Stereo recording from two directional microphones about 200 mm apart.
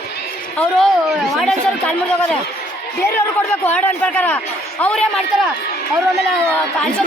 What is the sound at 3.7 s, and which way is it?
A man's voice, 10° left (ahead or behind).